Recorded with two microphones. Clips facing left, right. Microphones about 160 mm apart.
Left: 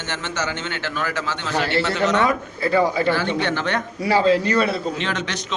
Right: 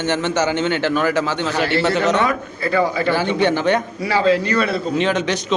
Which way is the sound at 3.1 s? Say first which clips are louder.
Right 4 dB; 15° right (ahead or behind).